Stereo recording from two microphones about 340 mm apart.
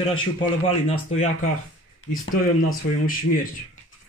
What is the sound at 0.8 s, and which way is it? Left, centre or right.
Speech, centre.